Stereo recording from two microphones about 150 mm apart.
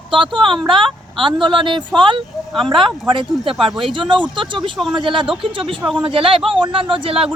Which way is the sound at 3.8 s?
35° right (ahead or behind).